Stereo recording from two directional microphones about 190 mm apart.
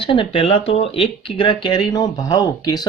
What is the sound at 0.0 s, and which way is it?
Speech, 25° left (ahead or behind).